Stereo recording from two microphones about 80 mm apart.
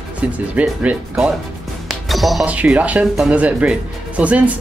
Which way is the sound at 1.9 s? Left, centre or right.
Centre.